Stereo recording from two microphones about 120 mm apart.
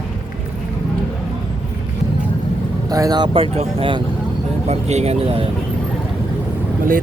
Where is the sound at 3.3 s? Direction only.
55° right (ahead or behind).